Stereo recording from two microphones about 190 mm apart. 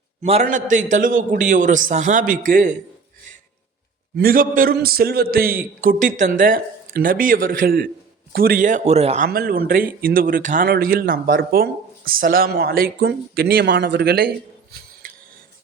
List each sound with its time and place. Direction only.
0.2 s a man's voice: 35° right (ahead or behind)
4.2 s speech: 50° right (ahead or behind)
9.2 s speech: 50° right (ahead or behind)